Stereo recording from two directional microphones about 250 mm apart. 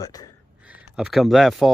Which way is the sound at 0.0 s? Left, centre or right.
Centre.